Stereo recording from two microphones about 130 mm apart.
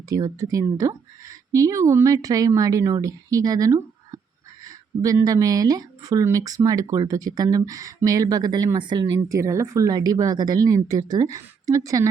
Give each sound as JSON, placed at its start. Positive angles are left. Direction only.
{"t": 0.1, "sound": "speech", "side_deg": -25}